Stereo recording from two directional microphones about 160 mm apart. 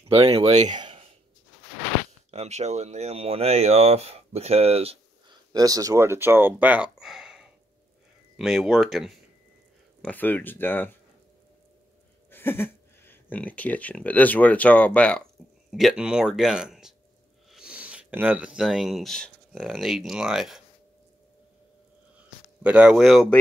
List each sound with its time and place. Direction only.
0.1 s speech: 35° right (ahead or behind)
0.7 s a sound: 30° right (ahead or behind)
2.3 s speech: 45° right (ahead or behind)
5.5 s speech: 25° right (ahead or behind); by 9.1 s centre (ahead or behind)
10.0 s speech: 10° left (ahead or behind)
12.3 s speech: 15° left (ahead or behind)
15.7 s speech: 5° right (ahead or behind)
22.6 s speech: 10° right (ahead or behind)